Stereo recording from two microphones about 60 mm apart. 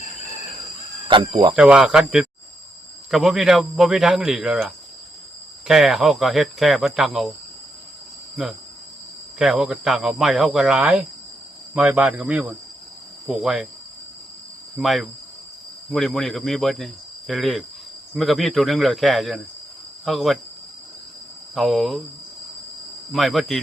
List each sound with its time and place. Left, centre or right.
1.5 s a man's voice: centre
5.6 s speech: centre
9.4 s a man's voice: centre
10.8 s a man's voice: centre
14.8 s speech: centre
21.5 s speech: centre
23.1 s speech: centre